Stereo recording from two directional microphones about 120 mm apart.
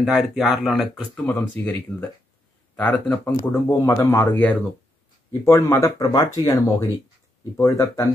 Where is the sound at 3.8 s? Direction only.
30° left (ahead or behind).